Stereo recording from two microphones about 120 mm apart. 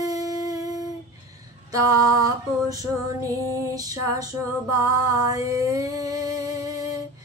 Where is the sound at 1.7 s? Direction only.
25° right (ahead or behind).